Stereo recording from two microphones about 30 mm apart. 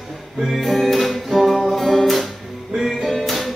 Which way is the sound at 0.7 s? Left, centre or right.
Centre.